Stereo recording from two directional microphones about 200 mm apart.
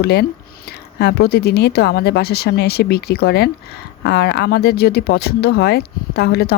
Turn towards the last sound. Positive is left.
turn(degrees=55)  # may be behind; listen again after turning